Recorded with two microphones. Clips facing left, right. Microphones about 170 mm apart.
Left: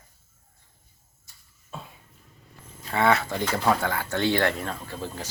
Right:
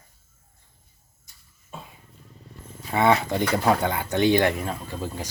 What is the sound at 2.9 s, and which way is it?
Speech, 20° right (ahead or behind).